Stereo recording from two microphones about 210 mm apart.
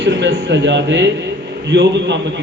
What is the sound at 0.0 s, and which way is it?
A man's voice, 55° right (ahead or behind).